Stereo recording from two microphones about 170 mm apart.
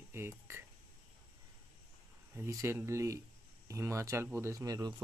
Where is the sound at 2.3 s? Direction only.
15° right (ahead or behind).